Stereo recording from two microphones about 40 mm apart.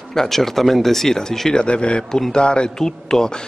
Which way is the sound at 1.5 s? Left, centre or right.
Left.